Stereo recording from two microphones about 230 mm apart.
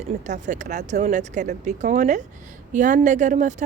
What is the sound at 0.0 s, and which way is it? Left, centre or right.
Speech, right.